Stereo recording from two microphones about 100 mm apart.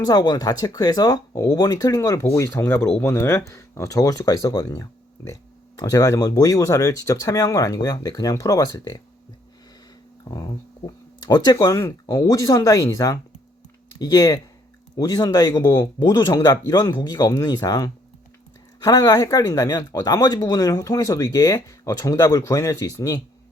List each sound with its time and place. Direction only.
0.0 s speech: 45° left (ahead or behind)
10.3 s speech: 40° left (ahead or behind)